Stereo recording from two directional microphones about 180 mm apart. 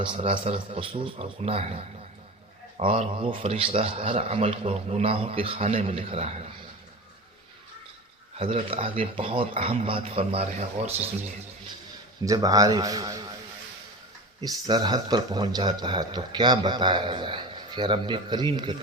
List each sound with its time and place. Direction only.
0.0 s a man's voice: 30° right (ahead or behind)
8.4 s a man's voice: 30° right (ahead or behind)
12.2 s speech: 20° right (ahead or behind)
14.4 s speech: 20° right (ahead or behind)